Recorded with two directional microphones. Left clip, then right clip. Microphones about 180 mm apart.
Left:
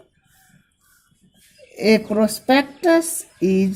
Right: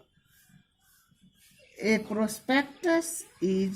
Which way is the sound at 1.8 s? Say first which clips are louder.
Left 11 dB; 40° left (ahead or behind).